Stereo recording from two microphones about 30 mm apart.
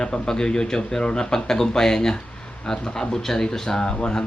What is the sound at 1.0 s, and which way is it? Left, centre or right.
Speech, left.